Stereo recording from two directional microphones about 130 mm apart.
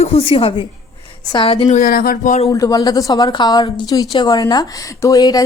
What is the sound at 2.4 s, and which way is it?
A woman's voice, 25° left (ahead or behind).